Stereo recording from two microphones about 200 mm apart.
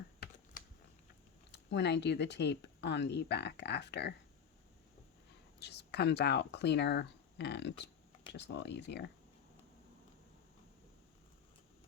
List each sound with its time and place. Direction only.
1.5 s speech: 60° left (ahead or behind)
5.5 s speech: 55° left (ahead or behind)